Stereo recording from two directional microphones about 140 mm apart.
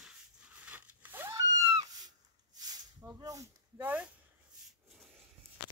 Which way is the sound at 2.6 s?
30° right (ahead or behind).